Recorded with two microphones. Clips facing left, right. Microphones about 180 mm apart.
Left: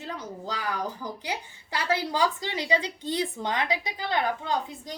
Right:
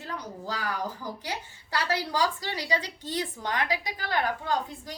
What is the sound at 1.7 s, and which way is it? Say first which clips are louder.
A woman's voice: left 1 dB; 20° left (ahead or behind).